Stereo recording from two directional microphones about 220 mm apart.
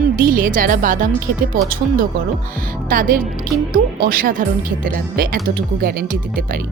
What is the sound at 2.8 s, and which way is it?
Speech, 40° right (ahead or behind).